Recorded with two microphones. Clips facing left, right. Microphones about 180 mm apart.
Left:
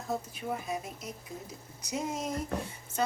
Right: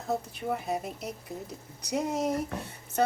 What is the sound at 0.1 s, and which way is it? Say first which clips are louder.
A woman's voice: right 4 dB; 65° right (ahead or behind).